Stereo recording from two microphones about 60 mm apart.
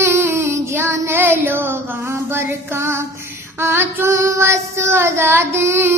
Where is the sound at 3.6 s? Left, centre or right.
Right.